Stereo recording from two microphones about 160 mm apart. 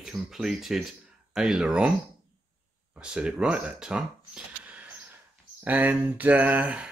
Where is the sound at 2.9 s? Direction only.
5° right (ahead or behind).